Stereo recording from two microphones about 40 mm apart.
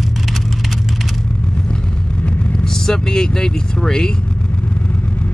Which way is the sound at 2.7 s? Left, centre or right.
Centre.